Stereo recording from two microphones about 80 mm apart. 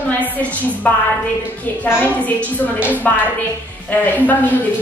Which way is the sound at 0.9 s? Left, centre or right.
Centre.